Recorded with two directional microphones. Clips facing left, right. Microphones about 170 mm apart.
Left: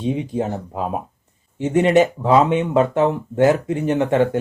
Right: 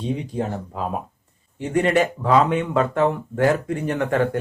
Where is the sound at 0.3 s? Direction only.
20° left (ahead or behind).